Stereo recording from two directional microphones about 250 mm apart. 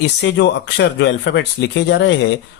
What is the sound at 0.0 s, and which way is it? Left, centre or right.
Speech, left.